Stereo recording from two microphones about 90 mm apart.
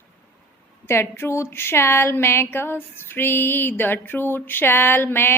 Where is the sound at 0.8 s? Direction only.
25° left (ahead or behind).